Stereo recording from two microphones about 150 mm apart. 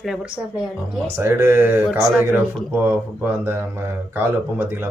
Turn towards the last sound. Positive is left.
turn(degrees=-15)  # may be behind; listen again after turning